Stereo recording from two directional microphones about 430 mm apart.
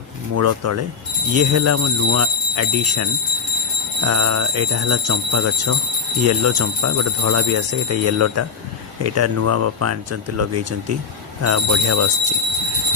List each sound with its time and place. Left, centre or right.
0.3 s speech: right